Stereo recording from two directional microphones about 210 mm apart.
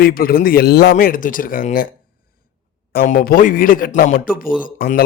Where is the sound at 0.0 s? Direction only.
45° left (ahead or behind).